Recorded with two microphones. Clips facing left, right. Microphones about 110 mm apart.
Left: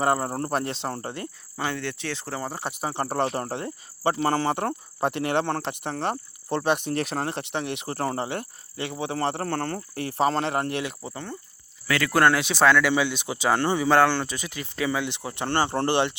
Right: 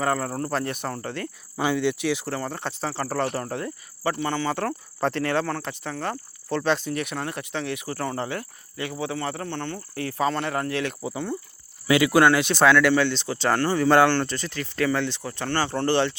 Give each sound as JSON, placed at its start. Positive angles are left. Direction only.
{"t": 0.0, "sound": "speech", "side_deg": 20}
{"t": 1.5, "sound": "speech", "side_deg": -5}
{"t": 2.3, "sound": "speech", "side_deg": 10}
{"t": 4.2, "sound": "speech", "side_deg": 35}
{"t": 4.5, "sound": "speech", "side_deg": 15}
{"t": 5.9, "sound": "cricket", "side_deg": 20}
{"t": 6.9, "sound": "speech", "side_deg": 35}
{"t": 9.4, "sound": "speech", "side_deg": 40}
{"t": 10.0, "sound": "speech", "side_deg": 25}
{"t": 11.0, "sound": "speech", "side_deg": -5}
{"t": 12.1, "sound": "speech", "side_deg": 0}
{"t": 15.9, "sound": "speech", "side_deg": 15}